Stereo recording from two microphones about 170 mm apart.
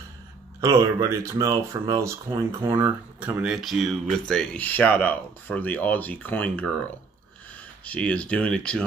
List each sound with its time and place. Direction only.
0.6 s speech: 15° right (ahead or behind); by 6.7 s 10° left (ahead or behind)
7.8 s speech: 5° left (ahead or behind)